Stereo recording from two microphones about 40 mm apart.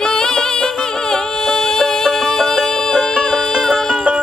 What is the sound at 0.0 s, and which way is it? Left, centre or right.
Music, centre.